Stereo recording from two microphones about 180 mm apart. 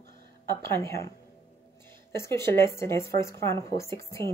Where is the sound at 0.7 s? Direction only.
15° left (ahead or behind).